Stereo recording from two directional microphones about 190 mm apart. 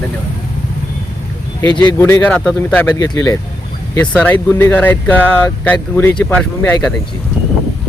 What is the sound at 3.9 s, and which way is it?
Speech, 5° left (ahead or behind).